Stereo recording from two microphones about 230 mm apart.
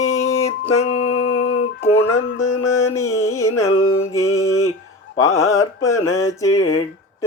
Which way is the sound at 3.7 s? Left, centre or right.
Left.